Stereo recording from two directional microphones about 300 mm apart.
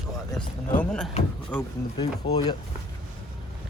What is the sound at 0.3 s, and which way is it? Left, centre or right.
Speech, centre.